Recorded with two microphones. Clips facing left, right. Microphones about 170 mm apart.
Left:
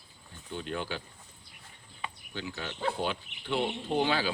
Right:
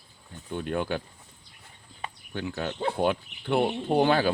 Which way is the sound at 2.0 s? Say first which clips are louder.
Right 5 dB; 50° right (ahead or behind).